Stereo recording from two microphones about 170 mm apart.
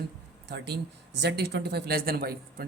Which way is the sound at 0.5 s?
75° right (ahead or behind).